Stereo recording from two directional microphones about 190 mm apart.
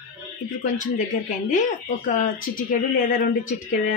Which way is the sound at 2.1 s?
45° left (ahead or behind).